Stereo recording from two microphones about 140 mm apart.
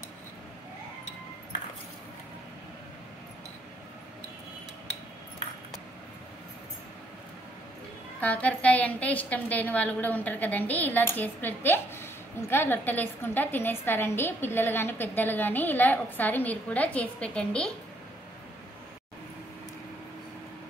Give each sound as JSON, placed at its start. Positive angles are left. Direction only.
{"t": 8.2, "sound": "a woman's voice", "side_deg": 10}